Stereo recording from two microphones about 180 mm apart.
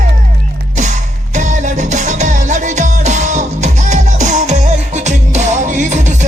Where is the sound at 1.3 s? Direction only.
40° right (ahead or behind).